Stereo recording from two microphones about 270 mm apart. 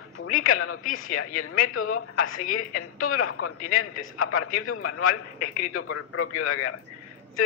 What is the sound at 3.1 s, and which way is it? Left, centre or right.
A man's voice, left.